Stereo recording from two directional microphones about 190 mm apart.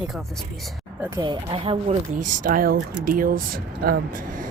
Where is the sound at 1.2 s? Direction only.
25° right (ahead or behind).